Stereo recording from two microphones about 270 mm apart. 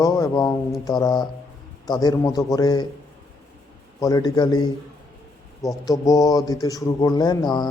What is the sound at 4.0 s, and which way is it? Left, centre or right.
Speech, centre.